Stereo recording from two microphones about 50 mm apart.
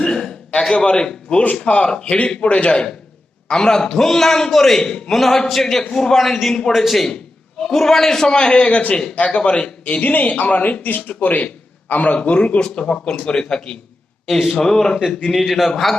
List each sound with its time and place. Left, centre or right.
0.0 s a sound: centre
0.6 s a man's voice: centre; by 1.9 s left
1.9 s a man's voice: centre
6.5 s a man's voice: centre
6.7 s a man's voice: centre; by 10.0 s left
10.0 s a man's voice: left; by 13.7 s centre
14.3 s a man's voice: centre
14.9 s a man's voice: left
15.3 s a man's voice: centre